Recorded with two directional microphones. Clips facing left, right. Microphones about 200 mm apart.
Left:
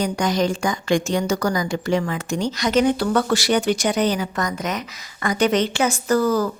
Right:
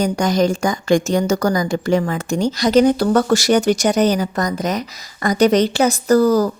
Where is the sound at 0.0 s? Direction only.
45° right (ahead or behind).